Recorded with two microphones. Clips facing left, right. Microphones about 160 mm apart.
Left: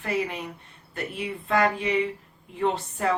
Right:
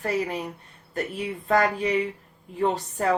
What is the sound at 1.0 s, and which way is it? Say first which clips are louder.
Speech: right 2 dB; 40° right (ahead or behind).